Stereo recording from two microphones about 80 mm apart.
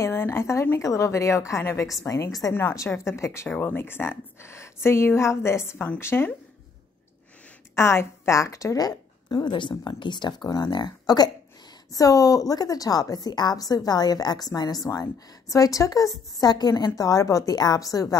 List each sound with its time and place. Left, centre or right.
0.0 s speech: left
3.4 s speech: left
7.7 s a woman's voice: left
9.4 s speech: left
11.9 s a woman's voice: left